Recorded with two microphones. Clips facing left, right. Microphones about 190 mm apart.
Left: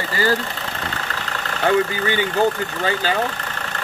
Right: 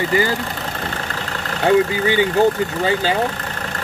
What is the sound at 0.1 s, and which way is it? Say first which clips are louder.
Speech: right 4 dB; 20° right (ahead or behind).